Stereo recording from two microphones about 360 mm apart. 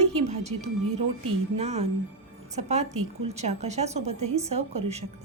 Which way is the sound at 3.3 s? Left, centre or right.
Centre.